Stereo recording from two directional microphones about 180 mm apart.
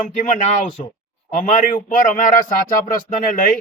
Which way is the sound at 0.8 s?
40° left (ahead or behind).